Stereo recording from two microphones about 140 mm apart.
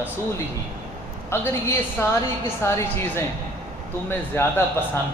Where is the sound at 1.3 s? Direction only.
20° left (ahead or behind).